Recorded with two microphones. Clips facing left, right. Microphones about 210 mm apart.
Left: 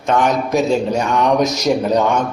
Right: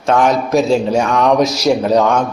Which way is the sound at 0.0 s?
Centre (ahead or behind).